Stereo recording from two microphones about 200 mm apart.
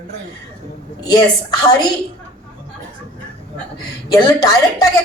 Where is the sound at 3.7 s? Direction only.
20° left (ahead or behind).